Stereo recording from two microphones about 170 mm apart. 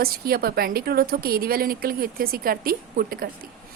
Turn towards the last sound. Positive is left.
turn(degrees=-60)  # may be behind; listen again after turning